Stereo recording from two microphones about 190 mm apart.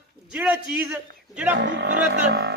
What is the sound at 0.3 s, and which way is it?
A man's voice, 5° right (ahead or behind).